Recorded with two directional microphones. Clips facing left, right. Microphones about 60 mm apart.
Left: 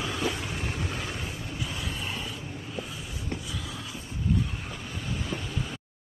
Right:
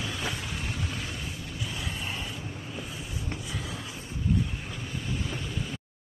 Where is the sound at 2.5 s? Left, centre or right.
Centre.